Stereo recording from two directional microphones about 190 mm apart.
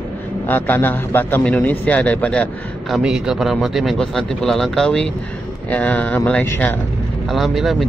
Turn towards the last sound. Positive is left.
turn(degrees=0)  # may be behind; listen again after turning